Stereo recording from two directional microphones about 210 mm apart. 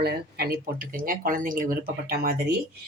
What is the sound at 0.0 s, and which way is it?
Speech, 50° right (ahead or behind).